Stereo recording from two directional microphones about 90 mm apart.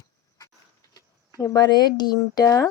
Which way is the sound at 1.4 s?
45° left (ahead or behind).